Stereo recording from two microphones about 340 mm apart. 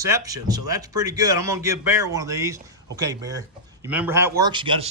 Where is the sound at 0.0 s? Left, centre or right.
Centre.